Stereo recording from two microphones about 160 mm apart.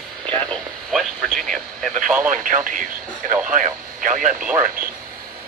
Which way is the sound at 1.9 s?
55° right (ahead or behind).